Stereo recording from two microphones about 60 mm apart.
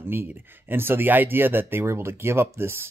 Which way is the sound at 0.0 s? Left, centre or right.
Right.